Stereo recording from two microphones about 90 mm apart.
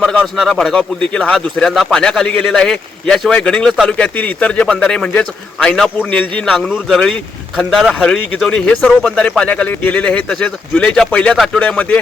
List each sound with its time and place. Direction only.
0.0 s a man's voice: 15° left (ahead or behind)